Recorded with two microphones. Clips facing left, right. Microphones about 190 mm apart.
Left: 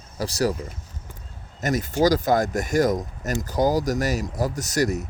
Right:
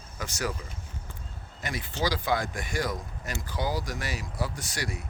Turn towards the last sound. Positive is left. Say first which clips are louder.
# left 12 dB
turn(degrees=45)  # may be behind; listen again after turning